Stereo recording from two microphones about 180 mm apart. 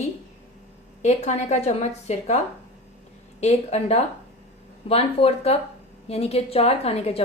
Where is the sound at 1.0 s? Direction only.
40° left (ahead or behind).